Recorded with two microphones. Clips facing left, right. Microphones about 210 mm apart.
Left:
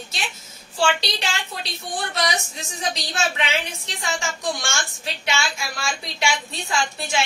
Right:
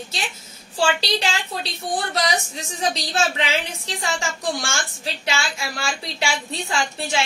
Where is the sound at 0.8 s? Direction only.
30° right (ahead or behind).